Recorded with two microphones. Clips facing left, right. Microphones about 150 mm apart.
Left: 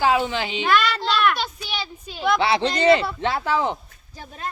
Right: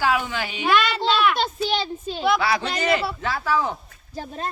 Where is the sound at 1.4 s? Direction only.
45° right (ahead or behind).